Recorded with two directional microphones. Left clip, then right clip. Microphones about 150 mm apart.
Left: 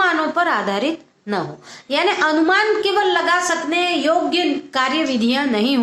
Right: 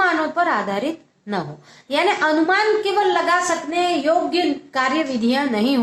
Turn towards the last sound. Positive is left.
turn(degrees=30)  # may be behind; listen again after turning